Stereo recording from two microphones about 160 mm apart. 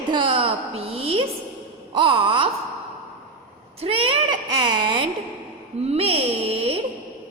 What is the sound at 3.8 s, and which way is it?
A woman's voice, 35° right (ahead or behind).